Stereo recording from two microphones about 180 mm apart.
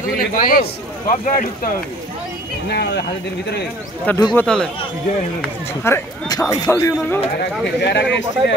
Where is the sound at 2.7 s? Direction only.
65° left (ahead or behind).